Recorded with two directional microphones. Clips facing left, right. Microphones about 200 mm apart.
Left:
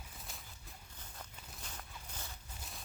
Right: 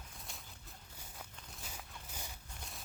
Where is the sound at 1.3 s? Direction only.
Centre (ahead or behind).